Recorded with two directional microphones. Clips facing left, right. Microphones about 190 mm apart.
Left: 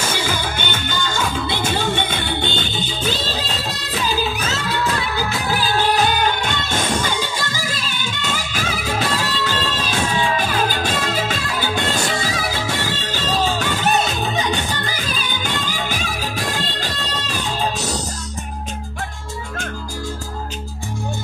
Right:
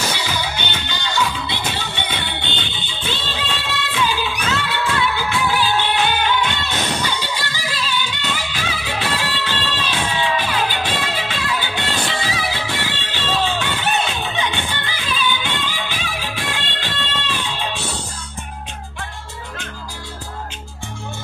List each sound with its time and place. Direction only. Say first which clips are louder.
0.1 s music: left 2 dB; 50° left (ahead or behind)
4.6 s music of bollywood: right 1 dB; 40° left (ahead or behind)